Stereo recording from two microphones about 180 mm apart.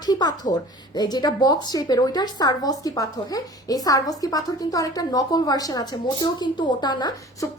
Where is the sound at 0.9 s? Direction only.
20° left (ahead or behind).